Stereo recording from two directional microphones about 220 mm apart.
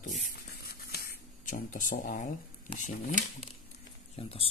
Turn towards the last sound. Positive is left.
turn(degrees=25)  # may be behind; listen again after turning